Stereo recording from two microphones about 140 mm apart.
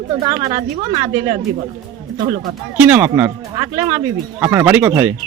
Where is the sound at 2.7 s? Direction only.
10° right (ahead or behind).